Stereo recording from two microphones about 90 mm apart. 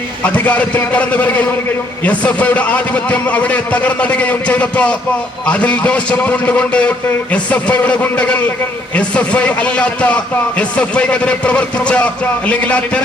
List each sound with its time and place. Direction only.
0.2 s a man's voice: 15° left (ahead or behind)